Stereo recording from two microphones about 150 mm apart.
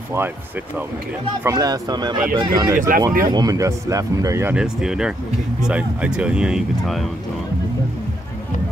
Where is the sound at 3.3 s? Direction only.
25° right (ahead or behind).